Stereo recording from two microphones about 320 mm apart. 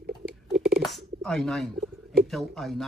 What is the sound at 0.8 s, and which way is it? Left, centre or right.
Speech, centre.